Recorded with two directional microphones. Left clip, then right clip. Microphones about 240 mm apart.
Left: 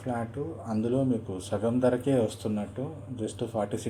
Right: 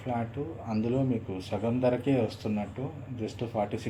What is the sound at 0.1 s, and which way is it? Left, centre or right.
Speech, left.